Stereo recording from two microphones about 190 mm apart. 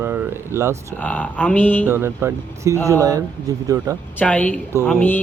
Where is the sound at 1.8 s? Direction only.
10° right (ahead or behind).